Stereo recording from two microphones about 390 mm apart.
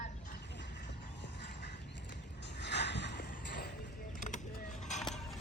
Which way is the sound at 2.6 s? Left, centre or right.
Left.